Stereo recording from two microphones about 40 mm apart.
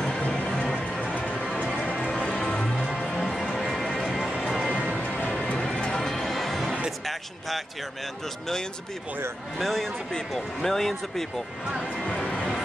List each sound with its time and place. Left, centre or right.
0.3 s music: centre
2.2 s music: left
2.8 s music: centre
3.1 s music: centre
5.1 s music: left
5.9 s music: centre
7.1 s speech: centre
9.6 s speech: centre
12.2 s music: centre